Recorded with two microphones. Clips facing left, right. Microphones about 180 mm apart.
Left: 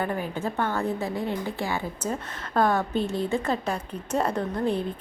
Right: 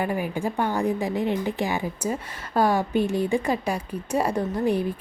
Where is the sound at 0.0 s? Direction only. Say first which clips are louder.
Right 2 dB; 10° right (ahead or behind).